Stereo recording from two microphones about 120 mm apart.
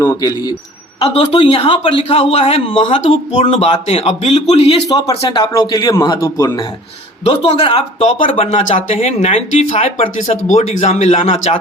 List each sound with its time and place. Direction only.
0.0 s speech: 25° left (ahead or behind)
1.1 s speech: 50° left (ahead or behind)
4.9 s a man's voice: 40° left (ahead or behind)
7.3 s speech: 55° left (ahead or behind)
10.2 s speech: 85° left; by 11.5 s 60° left (ahead or behind)